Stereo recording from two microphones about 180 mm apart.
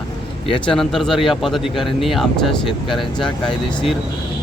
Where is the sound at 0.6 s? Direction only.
Centre (ahead or behind).